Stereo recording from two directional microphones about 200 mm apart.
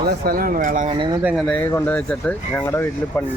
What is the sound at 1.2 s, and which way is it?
Speech, centre (ahead or behind).